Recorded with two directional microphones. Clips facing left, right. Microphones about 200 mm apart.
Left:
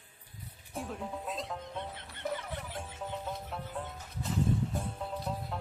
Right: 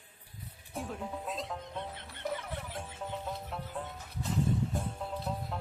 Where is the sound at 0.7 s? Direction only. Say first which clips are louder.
Even; centre (ahead or behind).